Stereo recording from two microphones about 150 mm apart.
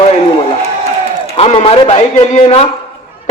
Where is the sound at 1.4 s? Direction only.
40° left (ahead or behind).